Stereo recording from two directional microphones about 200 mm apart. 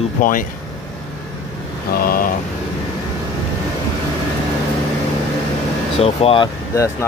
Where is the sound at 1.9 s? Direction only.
45° left (ahead or behind).